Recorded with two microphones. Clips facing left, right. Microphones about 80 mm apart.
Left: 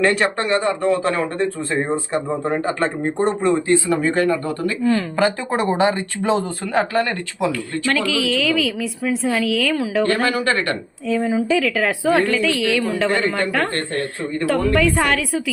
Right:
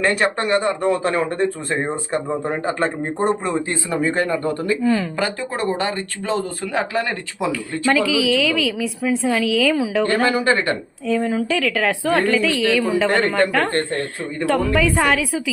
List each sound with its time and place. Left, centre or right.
0.0 s a woman's voice: centre
0.6 s speech: right
2.3 s speech: centre
4.1 s speech: right
4.8 s a woman's voice: centre
5.6 s speech: centre
6.3 s a woman's voice: centre
10.2 s speech: right
11.0 s a woman's voice: centre